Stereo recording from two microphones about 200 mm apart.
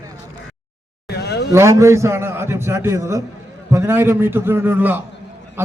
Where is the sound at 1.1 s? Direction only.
55° left (ahead or behind).